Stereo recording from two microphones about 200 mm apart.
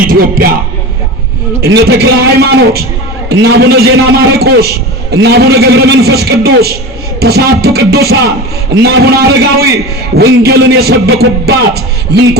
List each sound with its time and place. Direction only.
0.1 s speech: 50° right (ahead or behind)
1.6 s a man's voice: 50° right (ahead or behind)